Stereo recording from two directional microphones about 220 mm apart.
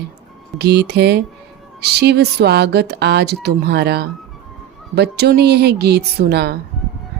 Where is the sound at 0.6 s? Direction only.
50° right (ahead or behind).